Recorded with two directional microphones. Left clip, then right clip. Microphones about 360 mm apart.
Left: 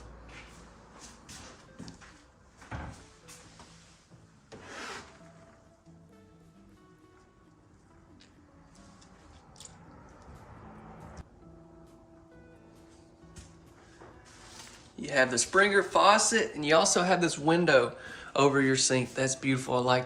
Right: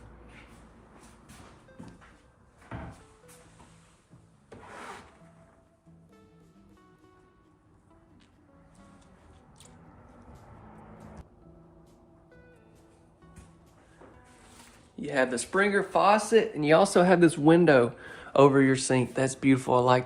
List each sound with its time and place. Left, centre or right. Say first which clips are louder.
14.9 s speech: left 1 dB; centre